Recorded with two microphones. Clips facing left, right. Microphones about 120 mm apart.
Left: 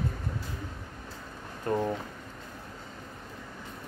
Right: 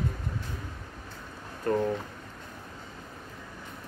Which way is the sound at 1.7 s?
20° left (ahead or behind).